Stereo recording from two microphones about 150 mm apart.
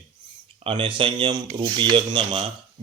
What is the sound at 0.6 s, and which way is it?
Speech, 35° right (ahead or behind).